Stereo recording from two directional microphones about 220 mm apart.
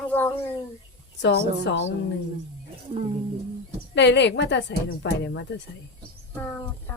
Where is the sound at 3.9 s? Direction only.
50° left (ahead or behind).